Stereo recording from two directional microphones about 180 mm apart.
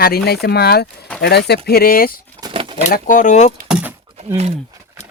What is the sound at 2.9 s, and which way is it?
Speech, 45° left (ahead or behind).